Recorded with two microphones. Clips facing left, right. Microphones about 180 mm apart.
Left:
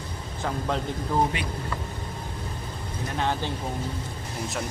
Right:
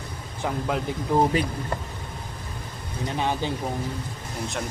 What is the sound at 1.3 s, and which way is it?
Speech, 40° right (ahead or behind).